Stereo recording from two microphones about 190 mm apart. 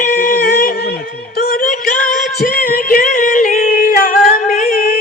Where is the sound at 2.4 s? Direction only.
50° left (ahead or behind).